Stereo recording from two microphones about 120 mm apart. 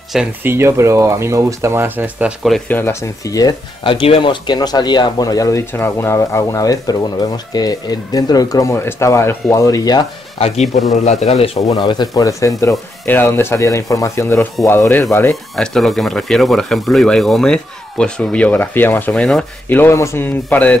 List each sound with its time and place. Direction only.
0.4 s speech: 20° right (ahead or behind)
2.7 s speech: 20° left (ahead or behind)
3.8 s speech: 45° left (ahead or behind); by 5.6 s 30° left (ahead or behind)
5.7 s speech: 20° left (ahead or behind)
10.4 s a man's voice: 70° left (ahead or behind)
11.6 s speech: 40° left (ahead or behind)
15.5 s speech: 5° left (ahead or behind)
19.8 s speech: 25° left (ahead or behind)